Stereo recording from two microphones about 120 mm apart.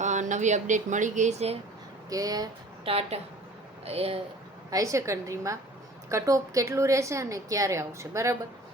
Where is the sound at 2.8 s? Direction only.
55° right (ahead or behind).